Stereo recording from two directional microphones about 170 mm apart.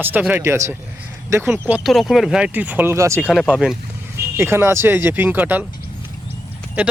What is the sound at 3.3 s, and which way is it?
Speech, centre (ahead or behind).